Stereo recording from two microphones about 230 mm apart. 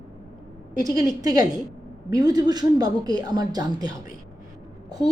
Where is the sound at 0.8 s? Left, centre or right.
Centre.